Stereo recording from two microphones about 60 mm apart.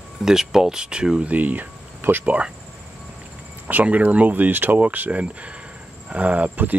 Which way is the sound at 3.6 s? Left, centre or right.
Right.